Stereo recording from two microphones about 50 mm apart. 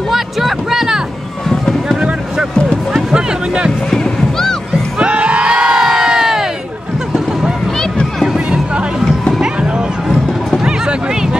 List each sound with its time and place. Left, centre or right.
0.1 s music: centre
2.0 s music: centre
3.9 s music: centre
4.9 s crowd: right